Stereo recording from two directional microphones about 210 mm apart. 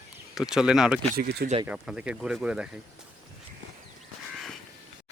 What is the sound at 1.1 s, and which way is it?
Speech, 50° right (ahead or behind).